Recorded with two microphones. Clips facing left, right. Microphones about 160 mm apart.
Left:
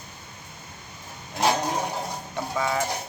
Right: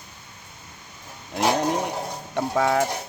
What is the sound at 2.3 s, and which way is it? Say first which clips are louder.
Mechanisms: right 6 dB; 65° right (ahead or behind).